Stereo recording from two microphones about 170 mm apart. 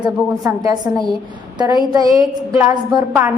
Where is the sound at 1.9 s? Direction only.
20° right (ahead or behind).